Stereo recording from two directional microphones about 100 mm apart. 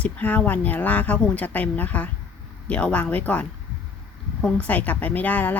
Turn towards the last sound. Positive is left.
turn(degrees=15)  # may be behind; listen again after turning